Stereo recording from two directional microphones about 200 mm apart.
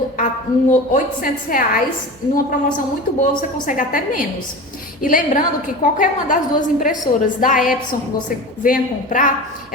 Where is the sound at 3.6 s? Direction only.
40° left (ahead or behind).